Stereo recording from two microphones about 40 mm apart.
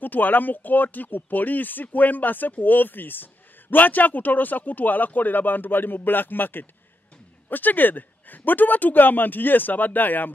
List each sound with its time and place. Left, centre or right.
0.0 s speech: left
3.7 s speech: left